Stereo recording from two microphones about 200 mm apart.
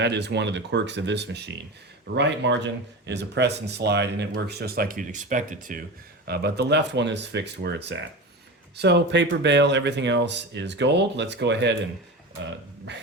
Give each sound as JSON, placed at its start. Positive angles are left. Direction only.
{"t": 0.0, "sound": "speech", "side_deg": -60}
{"t": 6.2, "sound": "speech", "side_deg": -55}